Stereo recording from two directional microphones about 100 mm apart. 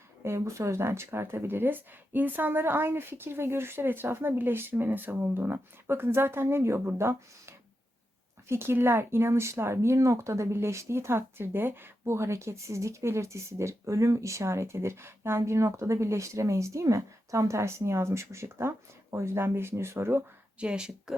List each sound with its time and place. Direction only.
0.3 s speech: 30° right (ahead or behind)
20.6 s speech: 10° right (ahead or behind)